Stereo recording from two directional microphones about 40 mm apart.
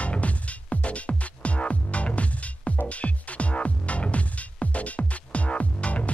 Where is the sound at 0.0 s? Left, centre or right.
Left.